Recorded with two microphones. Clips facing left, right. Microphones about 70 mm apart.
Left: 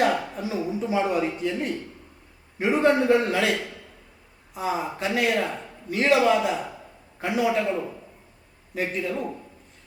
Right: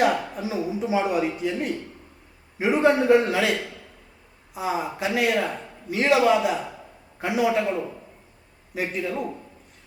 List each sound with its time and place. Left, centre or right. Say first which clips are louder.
0.0 s a man's voice: right 1 dB; centre